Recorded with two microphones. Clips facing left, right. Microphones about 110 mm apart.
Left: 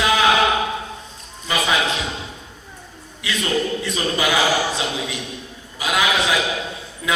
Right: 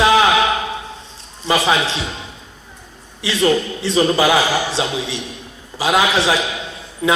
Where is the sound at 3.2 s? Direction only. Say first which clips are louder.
Right 5 dB; 30° right (ahead or behind).